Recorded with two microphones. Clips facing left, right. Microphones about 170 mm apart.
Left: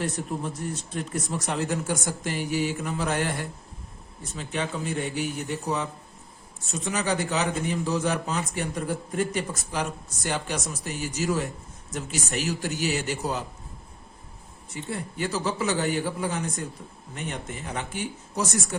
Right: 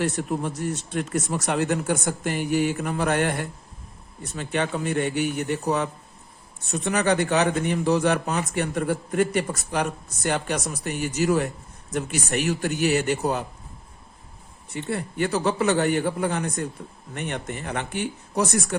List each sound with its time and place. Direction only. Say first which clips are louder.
0.0 s a man's voice: right 4 dB; 75° right (ahead or behind); by 13.4 s 60° right (ahead or behind)
14.7 s a man's voice: right 5 dB; 65° right (ahead or behind)